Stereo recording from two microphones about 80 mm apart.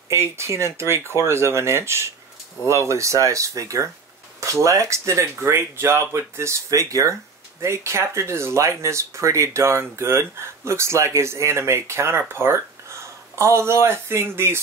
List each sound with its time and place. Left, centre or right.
0.1 s speech: right